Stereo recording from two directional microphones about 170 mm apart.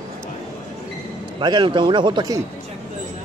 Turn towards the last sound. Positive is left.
turn(degrees=-25)  # may be behind; listen again after turning